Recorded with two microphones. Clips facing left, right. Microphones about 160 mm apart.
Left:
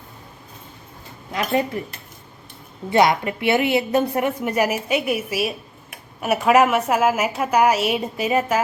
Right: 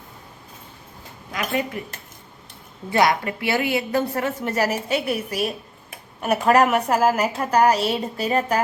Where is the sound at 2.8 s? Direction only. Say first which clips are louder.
Left 2 dB; 20° left (ahead or behind).